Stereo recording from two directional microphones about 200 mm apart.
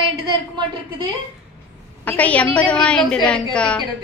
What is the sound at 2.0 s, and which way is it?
A woman's voice, 5° left (ahead or behind).